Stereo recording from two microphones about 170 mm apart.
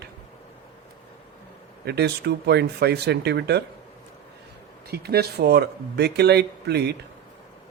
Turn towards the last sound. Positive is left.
turn(degrees=-75)  # may be behind; listen again after turning